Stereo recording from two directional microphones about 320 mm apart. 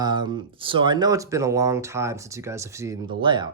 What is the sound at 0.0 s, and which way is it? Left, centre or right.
Speech, centre.